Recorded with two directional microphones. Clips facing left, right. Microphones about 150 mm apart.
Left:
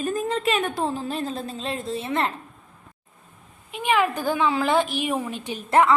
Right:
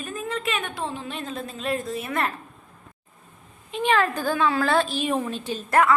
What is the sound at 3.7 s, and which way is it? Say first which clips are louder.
A woman's voice: even; 10° left (ahead or behind).